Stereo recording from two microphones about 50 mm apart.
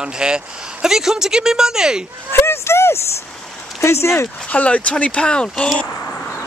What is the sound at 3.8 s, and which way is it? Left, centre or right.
Speech, left.